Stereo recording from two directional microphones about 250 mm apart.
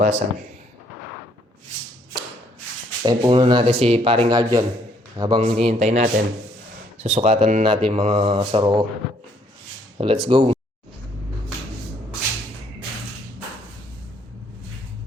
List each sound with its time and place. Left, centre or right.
0.0 s speech: right
3.0 s speech: centre
10.0 s speech: right